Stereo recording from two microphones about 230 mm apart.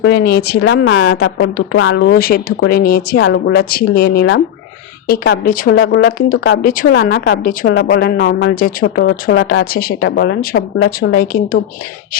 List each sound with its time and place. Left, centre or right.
0.0 s speech: left